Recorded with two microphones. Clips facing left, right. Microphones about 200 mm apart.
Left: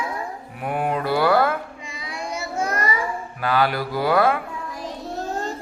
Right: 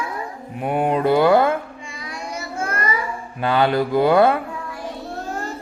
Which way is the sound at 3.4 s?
25° right (ahead or behind).